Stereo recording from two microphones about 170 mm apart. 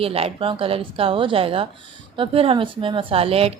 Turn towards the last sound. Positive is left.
turn(degrees=-35)  # may be behind; listen again after turning